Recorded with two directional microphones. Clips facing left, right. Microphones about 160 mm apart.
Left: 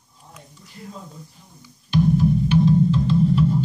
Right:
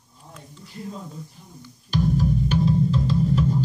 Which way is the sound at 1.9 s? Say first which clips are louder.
Left 4 dB; 35° right (ahead or behind).